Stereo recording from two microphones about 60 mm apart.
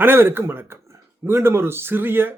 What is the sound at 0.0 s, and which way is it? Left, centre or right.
A man's voice, right.